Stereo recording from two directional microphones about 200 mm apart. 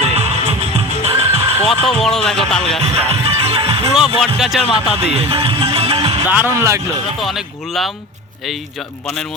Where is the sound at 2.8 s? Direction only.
30° right (ahead or behind).